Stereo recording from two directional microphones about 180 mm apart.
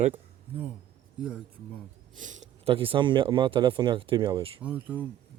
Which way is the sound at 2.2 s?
45° right (ahead or behind).